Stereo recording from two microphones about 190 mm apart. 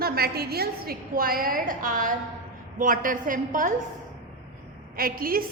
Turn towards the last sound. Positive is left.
turn(degrees=-50)  # may be behind; listen again after turning